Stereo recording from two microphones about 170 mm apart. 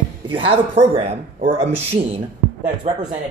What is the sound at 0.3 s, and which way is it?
Speech, 35° right (ahead or behind).